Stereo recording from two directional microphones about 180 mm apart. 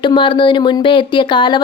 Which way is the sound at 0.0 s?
25° left (ahead or behind).